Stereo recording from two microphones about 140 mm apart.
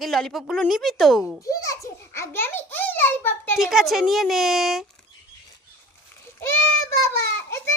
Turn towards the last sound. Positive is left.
turn(degrees=20)  # may be behind; listen again after turning